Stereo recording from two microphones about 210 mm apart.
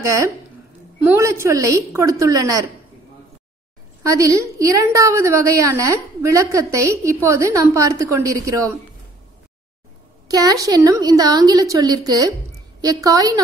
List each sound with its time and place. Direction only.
0.0 s a woman's voice: 15° right (ahead or behind)
4.1 s a woman's voice: 15° right (ahead or behind)
10.2 s a woman's voice: 15° right (ahead or behind)